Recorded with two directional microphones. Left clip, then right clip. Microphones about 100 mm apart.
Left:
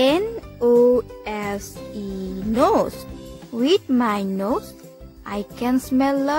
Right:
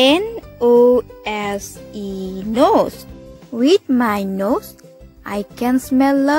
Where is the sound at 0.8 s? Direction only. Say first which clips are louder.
Right 4 dB; 35° right (ahead or behind).